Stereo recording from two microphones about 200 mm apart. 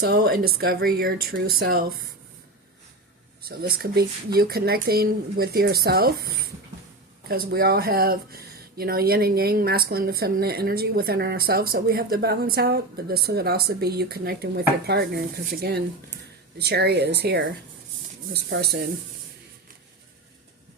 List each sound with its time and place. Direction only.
0.0 s speech: 50° right (ahead or behind)
3.6 s speech: 50° right (ahead or behind)